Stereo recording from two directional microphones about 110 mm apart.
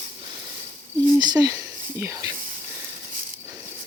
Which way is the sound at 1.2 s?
35° right (ahead or behind).